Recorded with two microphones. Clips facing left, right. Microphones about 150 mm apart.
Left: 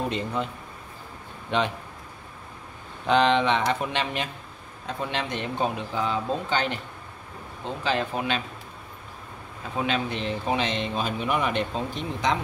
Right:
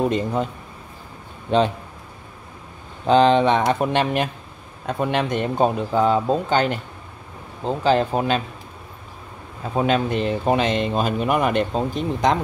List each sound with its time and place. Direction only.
0.1 s speech: 45° right (ahead or behind)
1.5 s speech: 35° right (ahead or behind)
3.1 s speech: 35° right (ahead or behind)
7.6 s speech: 35° right (ahead or behind)
9.8 s speech: 45° right (ahead or behind)